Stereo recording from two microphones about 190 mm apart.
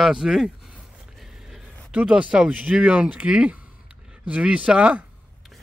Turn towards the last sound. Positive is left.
turn(degrees=-5)  # may be behind; listen again after turning